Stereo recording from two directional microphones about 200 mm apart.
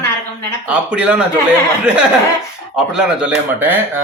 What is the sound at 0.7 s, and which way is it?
Speech, 5° right (ahead or behind).